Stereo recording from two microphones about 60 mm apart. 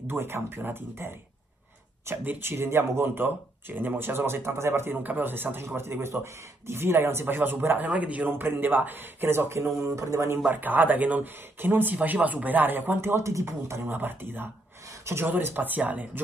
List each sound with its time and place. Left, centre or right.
0.1 s speech: right
2.2 s speech: right
5.0 s speech: right
8.3 s a man's voice: right
10.4 s speech: right
13.2 s a man's voice: right
13.8 s speech: right